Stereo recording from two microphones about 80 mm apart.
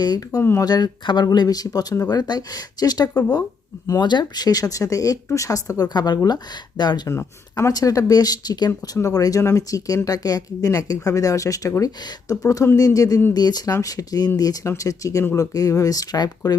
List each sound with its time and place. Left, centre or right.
0.0 s speech: left
0.3 s speech: left
0.6 s speech: left
5.9 s speech: left
7.1 s speech: left
7.7 s speech: left
9.0 s speech: left
13.3 s speech: left
14.6 s speech: left